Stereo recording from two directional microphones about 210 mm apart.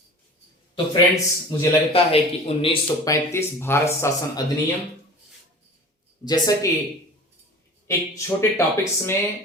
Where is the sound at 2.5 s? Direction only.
25° left (ahead or behind).